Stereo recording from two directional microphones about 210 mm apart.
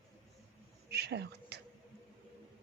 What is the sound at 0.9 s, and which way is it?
Whispering, 50° right (ahead or behind).